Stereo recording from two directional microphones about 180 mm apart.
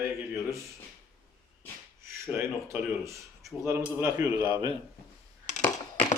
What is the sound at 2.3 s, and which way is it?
A man's voice, 15° right (ahead or behind).